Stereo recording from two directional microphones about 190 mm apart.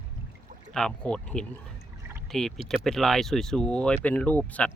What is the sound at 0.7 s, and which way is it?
Speech, 5° left (ahead or behind).